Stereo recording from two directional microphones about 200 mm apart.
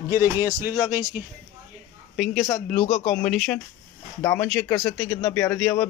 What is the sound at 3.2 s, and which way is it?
A man's voice, 5° left (ahead or behind).